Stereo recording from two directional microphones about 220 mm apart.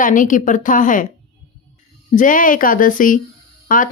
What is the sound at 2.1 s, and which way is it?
A woman's voice, 35° left (ahead or behind).